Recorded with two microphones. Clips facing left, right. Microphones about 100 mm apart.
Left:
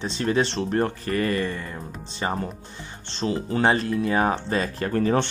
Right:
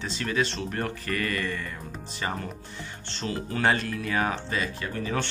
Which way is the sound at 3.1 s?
25° left (ahead or behind).